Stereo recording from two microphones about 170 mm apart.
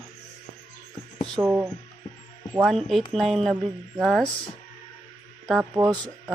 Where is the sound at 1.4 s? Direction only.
10° right (ahead or behind).